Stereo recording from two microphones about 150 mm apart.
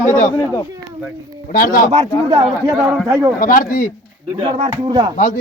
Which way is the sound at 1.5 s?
65° left (ahead or behind).